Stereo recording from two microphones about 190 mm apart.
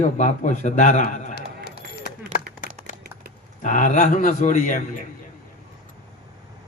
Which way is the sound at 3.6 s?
40° left (ahead or behind).